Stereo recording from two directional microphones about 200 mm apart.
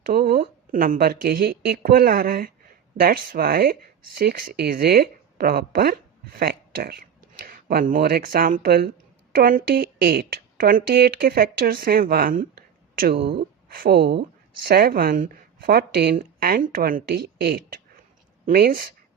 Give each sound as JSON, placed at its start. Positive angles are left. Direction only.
{"t": 0.0, "sound": "speech", "side_deg": -50}